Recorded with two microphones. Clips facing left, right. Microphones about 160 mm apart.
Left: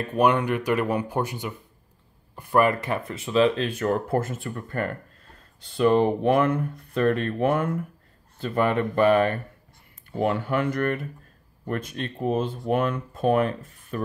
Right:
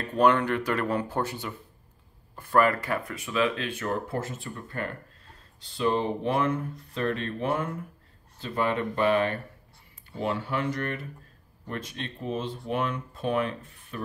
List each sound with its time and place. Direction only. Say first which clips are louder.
0.0 s speech: left 1 dB; 15° left (ahead or behind); by 14.0 s 45° left (ahead or behind)